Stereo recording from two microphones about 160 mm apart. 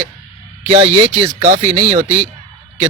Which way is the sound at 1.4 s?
45° right (ahead or behind).